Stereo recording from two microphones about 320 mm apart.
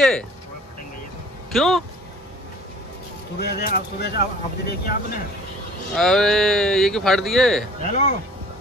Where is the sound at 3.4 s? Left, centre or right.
Left.